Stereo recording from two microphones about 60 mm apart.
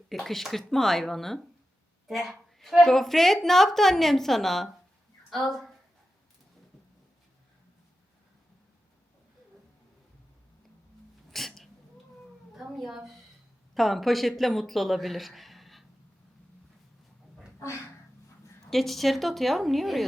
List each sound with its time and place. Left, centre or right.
0.1 s a woman's voice: centre
11.3 s sneeze: centre
12.5 s a woman's voice: centre
18.7 s a woman's voice: centre